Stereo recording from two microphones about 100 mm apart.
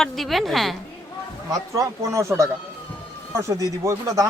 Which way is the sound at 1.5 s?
30° right (ahead or behind).